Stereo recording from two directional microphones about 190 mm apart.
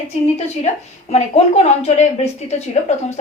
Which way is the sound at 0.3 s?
35° left (ahead or behind).